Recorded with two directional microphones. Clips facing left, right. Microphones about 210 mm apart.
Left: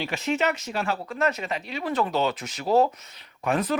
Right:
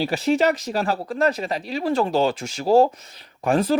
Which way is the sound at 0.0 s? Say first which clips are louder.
Right 6 dB; 35° right (ahead or behind).